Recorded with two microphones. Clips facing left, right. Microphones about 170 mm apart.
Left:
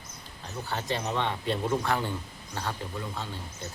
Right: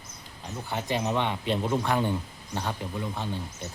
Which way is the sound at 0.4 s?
15° right (ahead or behind).